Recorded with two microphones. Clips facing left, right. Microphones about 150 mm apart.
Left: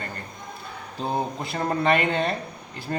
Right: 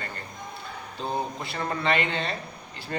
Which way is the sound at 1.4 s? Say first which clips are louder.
Left 6 dB; 40° left (ahead or behind).